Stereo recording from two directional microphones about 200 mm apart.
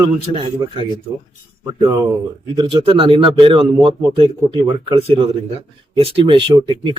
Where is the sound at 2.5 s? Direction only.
25° right (ahead or behind).